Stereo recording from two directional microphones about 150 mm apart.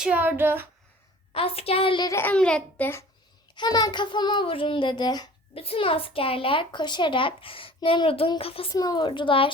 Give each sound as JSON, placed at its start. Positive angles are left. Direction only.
{"t": 0.0, "sound": "speech", "side_deg": -10}
{"t": 1.3, "sound": "a child's voice", "side_deg": 40}
{"t": 2.0, "sound": "a child's voice", "side_deg": 15}
{"t": 3.5, "sound": "a child's voice", "side_deg": 30}
{"t": 5.5, "sound": "a child's voice", "side_deg": 40}
{"t": 8.7, "sound": "a child's voice", "side_deg": 25}